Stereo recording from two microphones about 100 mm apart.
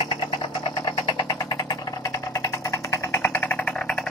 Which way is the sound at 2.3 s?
30° left (ahead or behind).